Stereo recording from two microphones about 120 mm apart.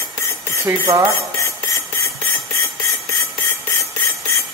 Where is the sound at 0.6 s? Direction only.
20° right (ahead or behind).